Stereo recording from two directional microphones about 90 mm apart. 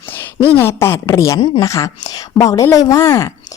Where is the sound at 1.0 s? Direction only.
40° left (ahead or behind).